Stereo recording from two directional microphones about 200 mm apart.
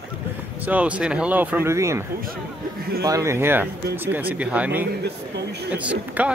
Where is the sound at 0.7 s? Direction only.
5° right (ahead or behind).